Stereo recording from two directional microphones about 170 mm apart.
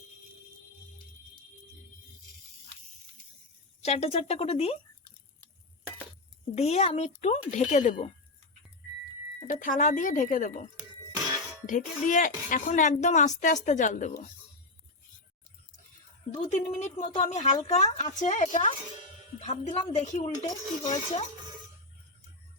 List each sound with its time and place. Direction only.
3.8 s a woman's voice: 40° left (ahead or behind)
6.6 s a woman's voice: 40° left (ahead or behind)
9.5 s speech: 50° left (ahead or behind)
16.3 s a woman's voice: 45° left (ahead or behind)